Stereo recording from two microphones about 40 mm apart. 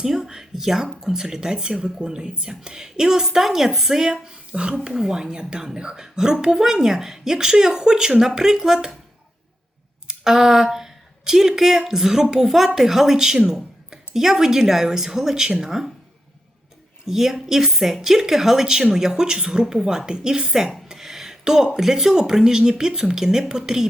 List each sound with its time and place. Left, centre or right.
0.0 s speech: centre
10.1 s speech: centre
17.1 s speech: centre